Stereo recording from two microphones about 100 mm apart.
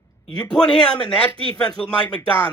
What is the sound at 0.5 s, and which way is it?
Speech, 10° left (ahead or behind).